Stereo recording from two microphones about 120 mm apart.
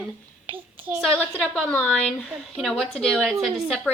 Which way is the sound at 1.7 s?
15° left (ahead or behind).